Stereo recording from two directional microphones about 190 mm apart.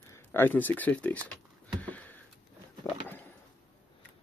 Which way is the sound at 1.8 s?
10° left (ahead or behind).